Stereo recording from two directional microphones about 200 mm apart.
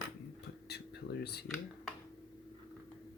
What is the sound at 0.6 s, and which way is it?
Speech, 55° left (ahead or behind).